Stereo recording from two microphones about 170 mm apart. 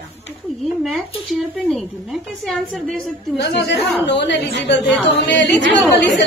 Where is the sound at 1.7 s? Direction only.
Centre (ahead or behind).